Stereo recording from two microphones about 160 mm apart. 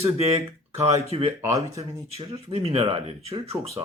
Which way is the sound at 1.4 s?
20° right (ahead or behind).